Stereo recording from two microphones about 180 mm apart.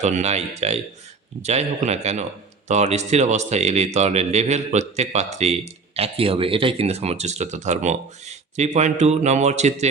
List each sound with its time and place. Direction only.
0.0 s speech: 40° right (ahead or behind)